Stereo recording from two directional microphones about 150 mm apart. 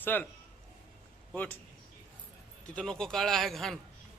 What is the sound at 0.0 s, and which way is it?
Speech, 15° left (ahead or behind).